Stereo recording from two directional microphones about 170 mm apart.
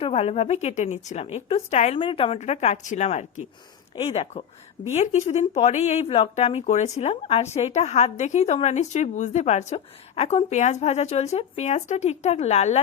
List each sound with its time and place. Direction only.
0.0 s speech: 40° left (ahead or behind)